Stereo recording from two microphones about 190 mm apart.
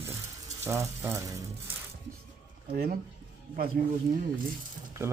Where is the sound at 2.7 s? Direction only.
50° right (ahead or behind).